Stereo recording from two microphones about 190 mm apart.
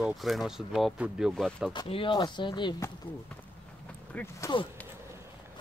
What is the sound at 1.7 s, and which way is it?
Speech, 25° left (ahead or behind).